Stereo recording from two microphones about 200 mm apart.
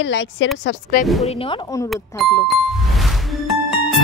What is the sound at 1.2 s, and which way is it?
Speech, 30° left (ahead or behind).